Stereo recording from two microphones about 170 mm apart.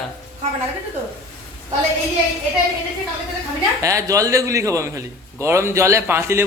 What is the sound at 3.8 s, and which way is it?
A man's voice, 20° right (ahead or behind).